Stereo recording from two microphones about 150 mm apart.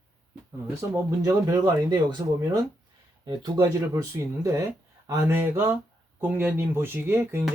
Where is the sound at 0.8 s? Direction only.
20° right (ahead or behind).